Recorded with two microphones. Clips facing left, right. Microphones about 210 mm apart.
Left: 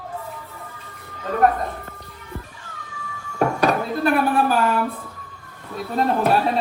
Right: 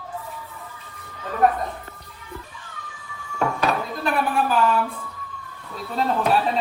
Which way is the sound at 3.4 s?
45° left (ahead or behind).